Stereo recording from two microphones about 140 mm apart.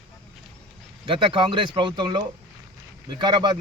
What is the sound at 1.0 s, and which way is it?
Speech, 40° right (ahead or behind).